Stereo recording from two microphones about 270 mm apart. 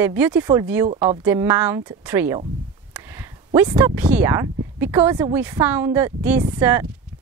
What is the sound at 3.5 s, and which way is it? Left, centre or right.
A woman's voice, centre.